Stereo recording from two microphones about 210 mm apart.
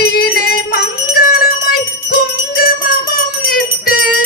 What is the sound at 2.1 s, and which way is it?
Jingle bell, 45° left (ahead or behind).